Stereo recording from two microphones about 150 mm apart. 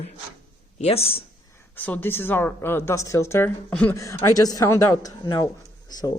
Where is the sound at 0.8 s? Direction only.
40° left (ahead or behind).